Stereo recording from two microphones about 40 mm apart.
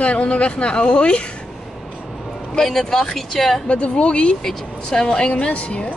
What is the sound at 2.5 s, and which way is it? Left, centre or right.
Speech, centre.